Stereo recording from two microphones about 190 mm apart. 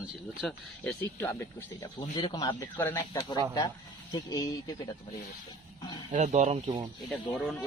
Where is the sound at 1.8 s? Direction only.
20° left (ahead or behind).